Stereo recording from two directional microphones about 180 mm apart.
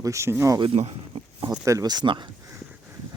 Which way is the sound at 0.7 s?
35° right (ahead or behind).